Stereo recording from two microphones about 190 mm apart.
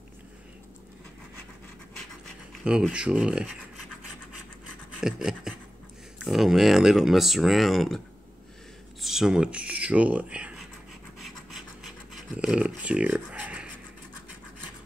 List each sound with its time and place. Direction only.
2.2 s speech: centre (ahead or behind)
5.0 s speech: 5° right (ahead or behind)
9.0 s speech: centre (ahead or behind)
11.1 s scratch: centre (ahead or behind)
12.4 s speech: 5° right (ahead or behind)